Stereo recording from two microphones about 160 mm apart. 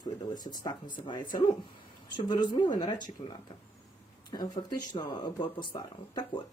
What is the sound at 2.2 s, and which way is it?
Speech, 25° left (ahead or behind).